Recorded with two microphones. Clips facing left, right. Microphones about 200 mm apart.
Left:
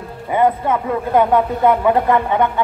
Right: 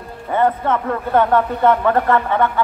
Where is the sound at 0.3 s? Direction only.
10° left (ahead or behind).